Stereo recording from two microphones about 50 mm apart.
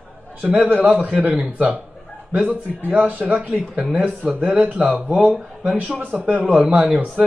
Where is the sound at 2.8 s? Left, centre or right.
Right; by 5.8 s centre.